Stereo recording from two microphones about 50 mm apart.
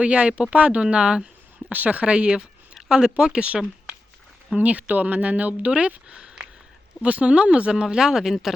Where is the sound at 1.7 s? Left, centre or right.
Right.